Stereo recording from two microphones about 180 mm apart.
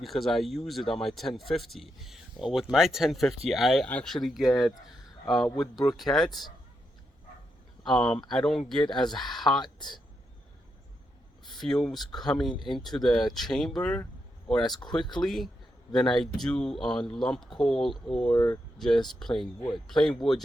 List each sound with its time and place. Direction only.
0.0 s speech: centre (ahead or behind)
5.8 s speech: centre (ahead or behind)
7.9 s speech: 5° left (ahead or behind)
9.6 s speech: 25° left (ahead or behind)
11.5 s speech: centre (ahead or behind)
18.3 s speech: 20° left (ahead or behind)
18.8 s speech: centre (ahead or behind)